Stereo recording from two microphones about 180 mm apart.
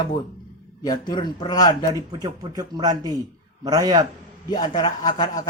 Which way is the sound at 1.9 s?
20° right (ahead or behind).